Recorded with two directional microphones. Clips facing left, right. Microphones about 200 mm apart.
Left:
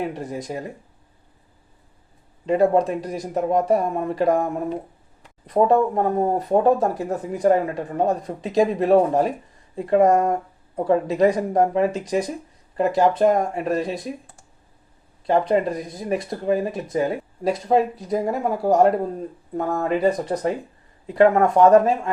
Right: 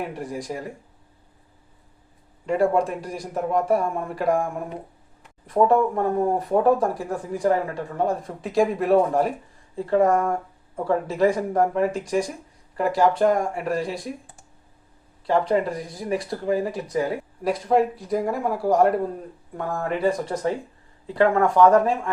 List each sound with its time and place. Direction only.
0.1 s speech: 20° left (ahead or behind)
2.5 s speech: 20° left (ahead or behind)
15.3 s speech: 20° left (ahead or behind)